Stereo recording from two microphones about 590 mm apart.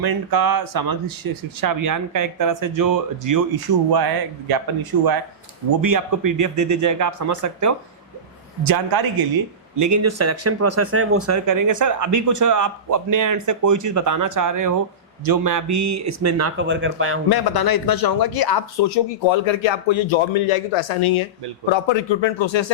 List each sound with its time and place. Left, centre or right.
0.0 s speech: right; by 17.2 s centre
17.2 s speech: left